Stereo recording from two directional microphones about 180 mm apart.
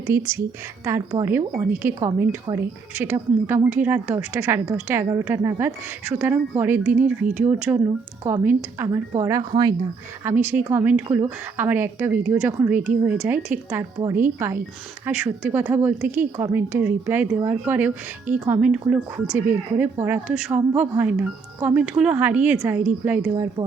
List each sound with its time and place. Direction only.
0.1 s speech: 15° right (ahead or behind)
10.2 s speech: 10° right (ahead or behind)